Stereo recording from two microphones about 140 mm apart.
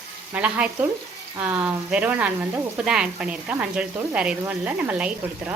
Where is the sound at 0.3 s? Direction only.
10° right (ahead or behind).